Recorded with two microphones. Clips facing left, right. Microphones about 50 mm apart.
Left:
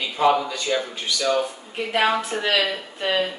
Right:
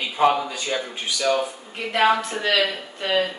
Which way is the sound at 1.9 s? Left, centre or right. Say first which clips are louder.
Right 2 dB; centre.